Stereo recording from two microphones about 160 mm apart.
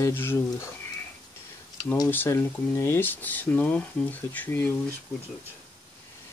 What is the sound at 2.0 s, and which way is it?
Speech, 15° left (ahead or behind).